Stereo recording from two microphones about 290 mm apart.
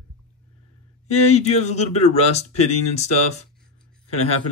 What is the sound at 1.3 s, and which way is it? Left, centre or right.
Speech, left.